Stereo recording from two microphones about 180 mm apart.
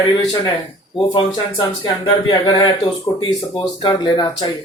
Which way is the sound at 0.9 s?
25° left (ahead or behind).